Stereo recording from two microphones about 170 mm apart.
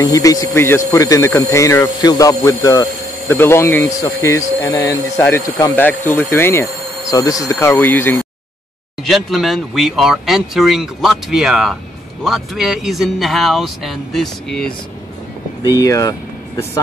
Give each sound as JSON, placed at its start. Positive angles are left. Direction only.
{"t": 0.0, "sound": "speech", "side_deg": 20}
{"t": 9.0, "sound": "speech", "side_deg": 0}
{"t": 15.8, "sound": "speech", "side_deg": 20}